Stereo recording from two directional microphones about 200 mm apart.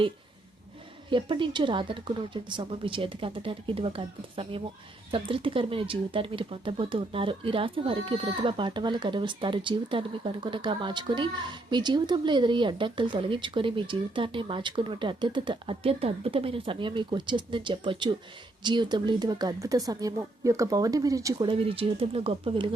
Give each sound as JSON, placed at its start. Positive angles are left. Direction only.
{"t": 1.1, "sound": "speech", "side_deg": -25}